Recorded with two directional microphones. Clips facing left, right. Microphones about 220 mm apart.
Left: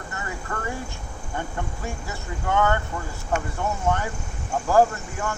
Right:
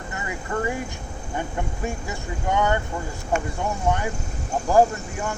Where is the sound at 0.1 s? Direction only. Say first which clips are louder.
Right 4 dB; 15° right (ahead or behind).